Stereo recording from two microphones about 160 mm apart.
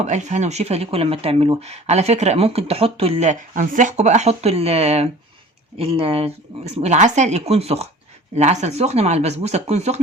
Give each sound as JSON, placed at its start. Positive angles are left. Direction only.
{"t": 0.0, "sound": "speech", "side_deg": -45}